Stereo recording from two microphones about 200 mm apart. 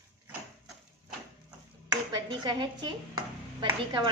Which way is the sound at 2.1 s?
20° right (ahead or behind).